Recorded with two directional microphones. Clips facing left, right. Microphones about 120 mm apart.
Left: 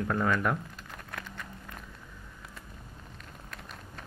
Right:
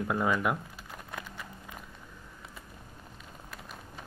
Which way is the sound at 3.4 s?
5° right (ahead or behind).